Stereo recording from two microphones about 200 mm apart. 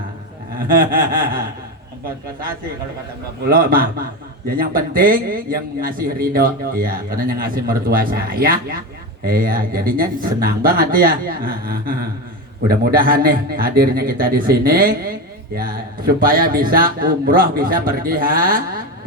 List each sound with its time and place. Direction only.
0.7 s a man's voice: 45° right (ahead or behind)
3.4 s a man's voice: 45° right (ahead or behind)